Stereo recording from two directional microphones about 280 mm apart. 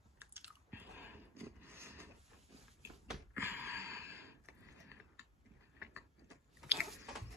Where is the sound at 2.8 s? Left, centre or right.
Centre.